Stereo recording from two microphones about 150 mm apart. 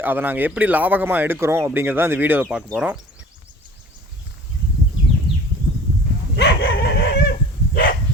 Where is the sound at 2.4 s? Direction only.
Centre (ahead or behind).